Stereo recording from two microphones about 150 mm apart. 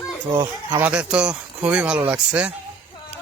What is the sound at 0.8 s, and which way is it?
Speech, 5° right (ahead or behind).